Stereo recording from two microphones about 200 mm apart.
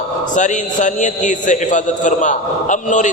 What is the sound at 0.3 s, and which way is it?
A man's voice, 40° left (ahead or behind).